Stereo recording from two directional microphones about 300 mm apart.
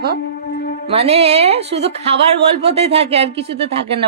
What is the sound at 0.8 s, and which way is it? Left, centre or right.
A woman's voice, centre.